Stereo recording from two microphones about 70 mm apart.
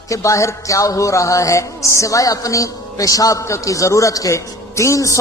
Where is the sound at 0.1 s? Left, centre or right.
Left.